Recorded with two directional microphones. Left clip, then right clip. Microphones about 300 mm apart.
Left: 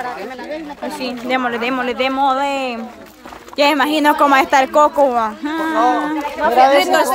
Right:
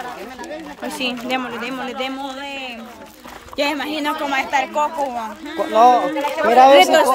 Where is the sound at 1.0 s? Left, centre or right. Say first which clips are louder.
Left 3 dB; centre.